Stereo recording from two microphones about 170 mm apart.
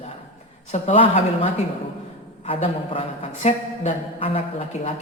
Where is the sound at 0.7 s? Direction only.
35° left (ahead or behind).